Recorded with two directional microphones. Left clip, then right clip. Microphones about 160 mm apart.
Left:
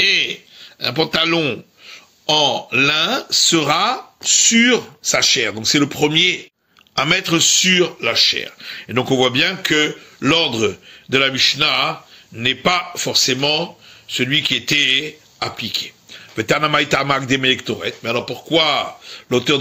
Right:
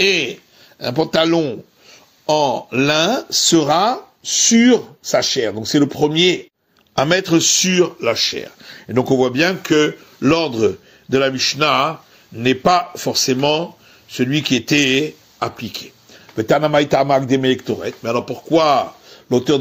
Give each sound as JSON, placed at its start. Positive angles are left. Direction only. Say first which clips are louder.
{"t": 0.0, "sound": "a man's voice", "louder": "left 1 dB", "side_deg": -55}
{"t": 1.9, "sound": "speech", "louder": "right 1 dB", "side_deg": -55}
{"t": 3.4, "sound": "a man's voice", "louder": "right 3 dB", "side_deg": -30}
{"t": 12.4, "sound": "a man's voice", "louder": "right 3 dB", "side_deg": -40}
{"t": 14.1, "sound": "a man's voice", "louder": "left 1 dB", "side_deg": -45}
{"t": 16.3, "sound": "speech", "louder": "right 2 dB", "side_deg": -25}
{"t": 17.8, "sound": "a man's voice", "louder": "even", "side_deg": -55}
{"t": 19.3, "sound": "speech", "louder": "right 1 dB", "side_deg": -25}